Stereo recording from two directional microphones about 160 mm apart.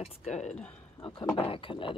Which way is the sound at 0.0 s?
40° left (ahead or behind).